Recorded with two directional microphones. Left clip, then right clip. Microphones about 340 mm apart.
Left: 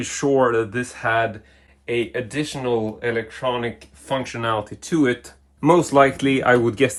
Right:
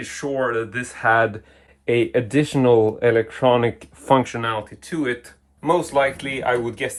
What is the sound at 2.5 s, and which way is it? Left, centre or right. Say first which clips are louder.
Speech: right 8 dB; right.